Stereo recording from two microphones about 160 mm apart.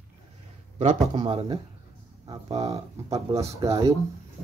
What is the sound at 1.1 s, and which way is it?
Speech, 35° right (ahead or behind).